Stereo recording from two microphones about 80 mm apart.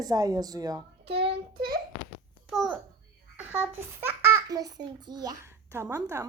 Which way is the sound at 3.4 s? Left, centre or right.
Right.